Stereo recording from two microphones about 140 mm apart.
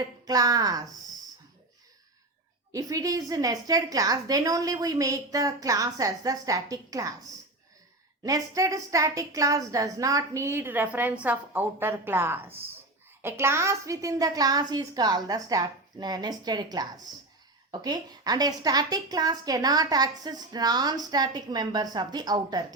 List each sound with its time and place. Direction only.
0.3 s a woman's voice: 25° right (ahead or behind)
2.7 s a woman's voice: 25° right (ahead or behind)
8.2 s a woman's voice: 25° right (ahead or behind)